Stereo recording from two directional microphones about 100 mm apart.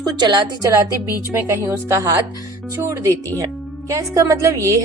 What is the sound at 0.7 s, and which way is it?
A woman's voice, 30° right (ahead or behind).